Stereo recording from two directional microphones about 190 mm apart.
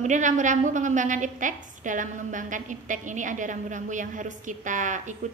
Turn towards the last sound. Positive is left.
turn(degrees=-40)  # may be behind; listen again after turning